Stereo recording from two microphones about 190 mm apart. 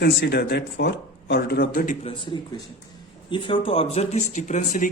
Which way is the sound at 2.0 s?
25° left (ahead or behind).